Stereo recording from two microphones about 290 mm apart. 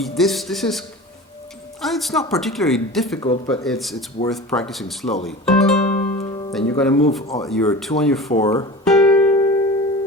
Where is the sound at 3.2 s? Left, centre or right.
Centre.